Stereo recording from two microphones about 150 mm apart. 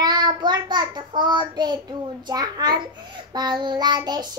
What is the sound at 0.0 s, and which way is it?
Child singing, 30° right (ahead or behind).